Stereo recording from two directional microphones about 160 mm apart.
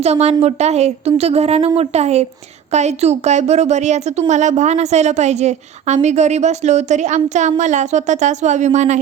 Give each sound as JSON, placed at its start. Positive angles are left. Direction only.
{"t": 0.0, "sound": "a woman's voice", "side_deg": -40}